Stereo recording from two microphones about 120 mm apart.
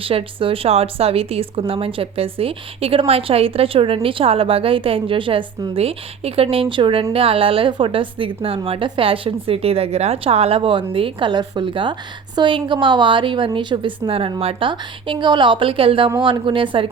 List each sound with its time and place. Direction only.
0.0 s speech: 50° right (ahead or behind)
5.7 s speech: 55° right (ahead or behind)